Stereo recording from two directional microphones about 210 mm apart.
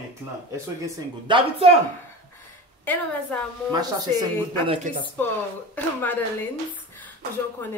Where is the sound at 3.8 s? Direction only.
20° right (ahead or behind).